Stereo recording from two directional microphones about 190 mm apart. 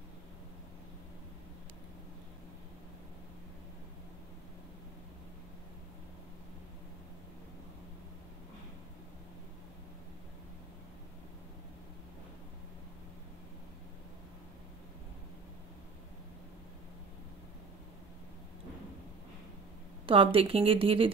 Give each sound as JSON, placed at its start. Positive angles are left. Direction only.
{"t": 20.1, "sound": "speech", "side_deg": -30}